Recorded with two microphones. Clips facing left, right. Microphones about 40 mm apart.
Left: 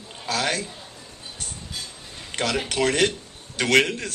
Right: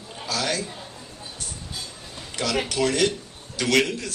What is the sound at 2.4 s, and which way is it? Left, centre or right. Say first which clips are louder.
A man's voice: even; left.